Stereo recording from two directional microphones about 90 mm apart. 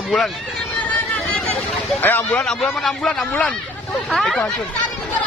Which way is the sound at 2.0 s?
20° left (ahead or behind).